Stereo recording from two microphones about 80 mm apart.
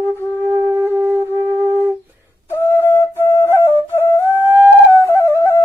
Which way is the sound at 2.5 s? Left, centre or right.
Left.